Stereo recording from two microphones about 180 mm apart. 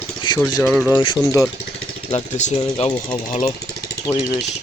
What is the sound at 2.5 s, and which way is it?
Speech, 30° left (ahead or behind).